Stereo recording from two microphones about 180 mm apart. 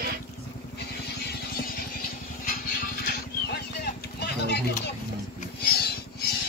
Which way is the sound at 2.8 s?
60° left (ahead or behind).